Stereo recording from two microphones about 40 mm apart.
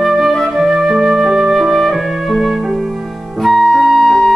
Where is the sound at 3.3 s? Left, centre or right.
Centre.